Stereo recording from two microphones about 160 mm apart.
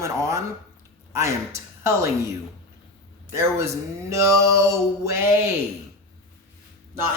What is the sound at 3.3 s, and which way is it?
A man's voice, 15° right (ahead or behind).